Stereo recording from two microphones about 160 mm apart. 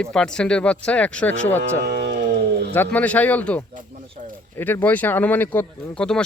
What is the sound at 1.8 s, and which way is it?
Speech, 80° right.